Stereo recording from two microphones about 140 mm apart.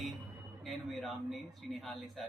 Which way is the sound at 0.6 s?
Centre (ahead or behind).